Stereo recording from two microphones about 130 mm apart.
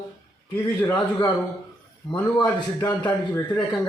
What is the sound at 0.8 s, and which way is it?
Speech, 25° left (ahead or behind).